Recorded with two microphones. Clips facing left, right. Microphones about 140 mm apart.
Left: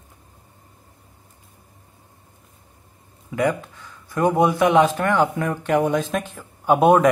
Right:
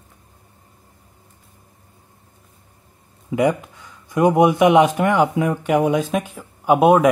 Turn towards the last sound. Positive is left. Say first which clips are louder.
# right 1 dB
turn(degrees=-5)  # may be behind; listen again after turning